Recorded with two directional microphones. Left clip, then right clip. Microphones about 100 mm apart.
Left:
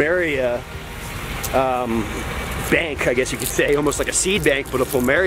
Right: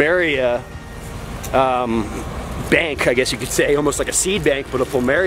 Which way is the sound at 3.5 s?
25° right (ahead or behind).